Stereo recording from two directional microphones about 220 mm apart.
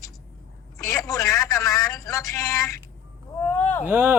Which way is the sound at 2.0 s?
15° left (ahead or behind).